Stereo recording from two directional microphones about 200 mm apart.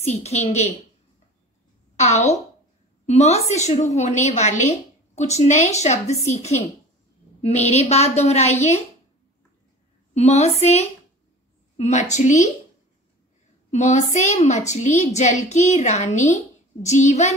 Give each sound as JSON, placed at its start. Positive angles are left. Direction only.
{"t": 0.0, "sound": "a woman's voice", "side_deg": 35}
{"t": 2.0, "sound": "a woman's voice", "side_deg": 35}
{"t": 10.1, "sound": "a woman's voice", "side_deg": 35}
{"t": 13.7, "sound": "a woman's voice", "side_deg": 35}